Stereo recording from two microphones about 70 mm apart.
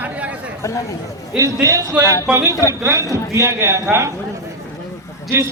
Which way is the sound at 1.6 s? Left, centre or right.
Right.